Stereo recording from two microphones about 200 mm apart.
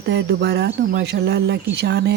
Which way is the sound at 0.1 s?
60° right (ahead or behind).